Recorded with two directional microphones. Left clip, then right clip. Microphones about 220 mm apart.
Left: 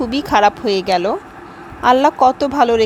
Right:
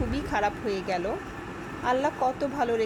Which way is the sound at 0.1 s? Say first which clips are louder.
Left 16 dB; 30° left (ahead or behind).